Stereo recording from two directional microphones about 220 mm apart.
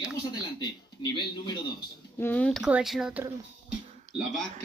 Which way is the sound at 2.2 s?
5° left (ahead or behind).